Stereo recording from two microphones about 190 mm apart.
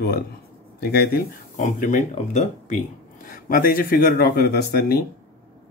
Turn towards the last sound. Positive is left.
turn(degrees=55)  # may be behind; listen again after turning